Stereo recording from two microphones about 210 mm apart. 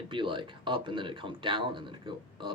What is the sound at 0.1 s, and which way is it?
Speech, 25° right (ahead or behind).